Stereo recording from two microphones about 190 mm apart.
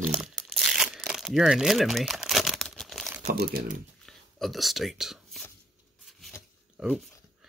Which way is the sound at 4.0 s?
Centre (ahead or behind).